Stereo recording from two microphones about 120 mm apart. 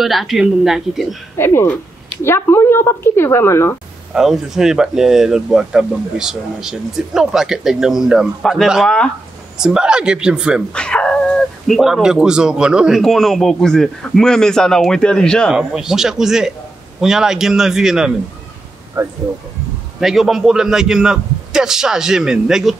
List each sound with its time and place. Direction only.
0.0 s speech: centre (ahead or behind)
1.4 s a woman's voice: 20° left (ahead or behind)
4.1 s speech: 5° right (ahead or behind)
9.6 s speech: 5° right (ahead or behind)
10.7 s speech: 10° left (ahead or behind)
15.5 s speech: 5° right (ahead or behind)
19.0 s speech: 25° right (ahead or behind)
20.0 s speech: centre (ahead or behind)